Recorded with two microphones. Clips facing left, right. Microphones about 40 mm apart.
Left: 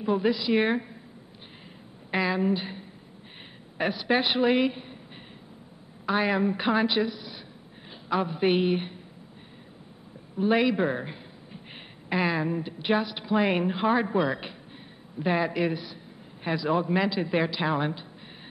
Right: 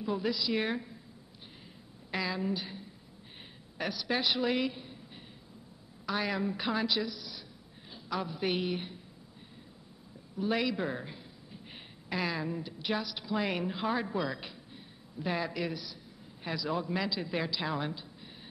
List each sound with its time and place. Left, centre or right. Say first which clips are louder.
0.0 s a woman's voice: left 7 dB; left
2.0 s a woman's voice: left 8 dB; left
6.0 s a woman's voice: left 8 dB; left
10.3 s a woman's voice: left 8 dB; left